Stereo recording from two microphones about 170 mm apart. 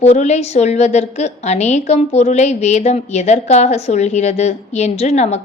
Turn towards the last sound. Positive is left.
turn(degrees=40)  # may be behind; listen again after turning